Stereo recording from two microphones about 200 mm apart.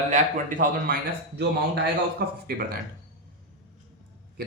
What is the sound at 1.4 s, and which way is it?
A man's voice, 55° right (ahead or behind).